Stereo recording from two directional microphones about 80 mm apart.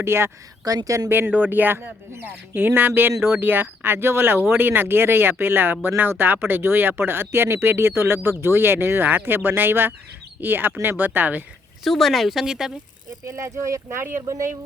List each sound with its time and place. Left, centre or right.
0.0 s speech: right
0.6 s speech: right
1.3 s speech: right
11.8 s speech: centre
13.2 s speech: right